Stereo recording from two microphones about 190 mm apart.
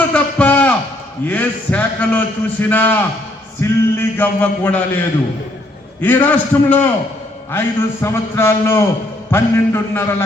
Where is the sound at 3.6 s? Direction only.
10° left (ahead or behind).